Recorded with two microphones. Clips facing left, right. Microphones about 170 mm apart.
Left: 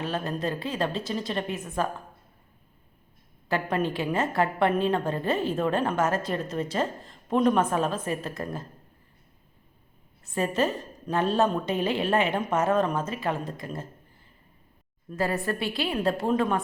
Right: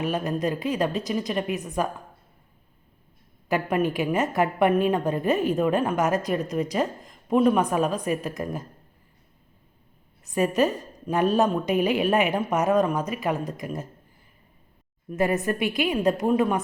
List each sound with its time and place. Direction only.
0.0 s a woman's voice: 15° right (ahead or behind)
3.5 s a woman's voice: 10° right (ahead or behind)
10.3 s a woman's voice: 15° right (ahead or behind)
15.1 s a woman's voice: 20° right (ahead or behind)